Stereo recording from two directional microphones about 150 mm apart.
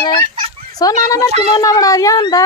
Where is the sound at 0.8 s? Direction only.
25° left (ahead or behind).